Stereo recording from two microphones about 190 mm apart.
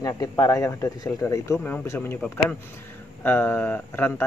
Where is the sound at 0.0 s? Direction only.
15° left (ahead or behind).